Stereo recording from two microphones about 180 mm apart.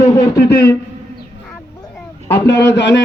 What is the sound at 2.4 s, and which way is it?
Speech, 75° left (ahead or behind).